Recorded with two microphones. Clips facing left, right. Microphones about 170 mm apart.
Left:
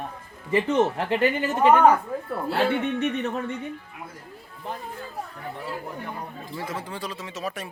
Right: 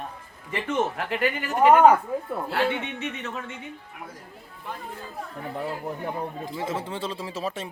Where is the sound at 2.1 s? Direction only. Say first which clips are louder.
Right 2 dB; 15° right (ahead or behind).